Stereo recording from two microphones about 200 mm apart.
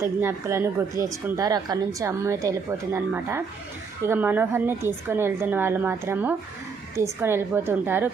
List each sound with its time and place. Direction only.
0.0 s a woman's voice: 15° right (ahead or behind)